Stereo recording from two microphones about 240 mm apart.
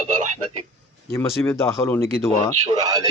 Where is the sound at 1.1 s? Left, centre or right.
Centre.